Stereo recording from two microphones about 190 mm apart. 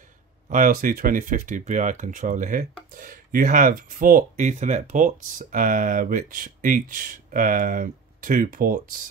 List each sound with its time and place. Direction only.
0.5 s speech: 45° right (ahead or behind)